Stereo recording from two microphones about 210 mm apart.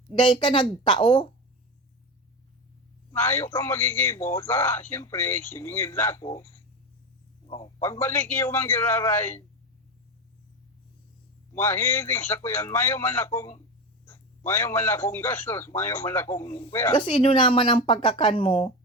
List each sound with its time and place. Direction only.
0.1 s speech: 25° left (ahead or behind)
3.1 s a man's voice: 10° left (ahead or behind)
7.4 s a sound: 25° left (ahead or behind)
7.8 s a man's voice: 10° left (ahead or behind)
11.5 s a man's voice: 10° left (ahead or behind)